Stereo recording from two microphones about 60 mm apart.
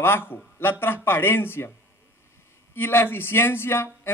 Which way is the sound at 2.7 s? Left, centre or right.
Left.